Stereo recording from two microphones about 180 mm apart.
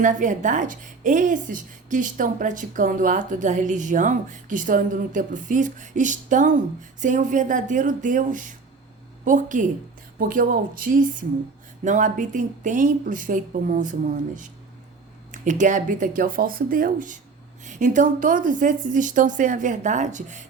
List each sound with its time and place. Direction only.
0.0 s a woman's voice: 45° right (ahead or behind)
15.3 s a woman's voice: 45° right (ahead or behind)